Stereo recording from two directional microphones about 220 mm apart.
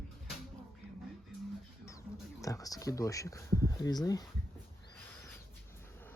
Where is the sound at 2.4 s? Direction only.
15° left (ahead or behind).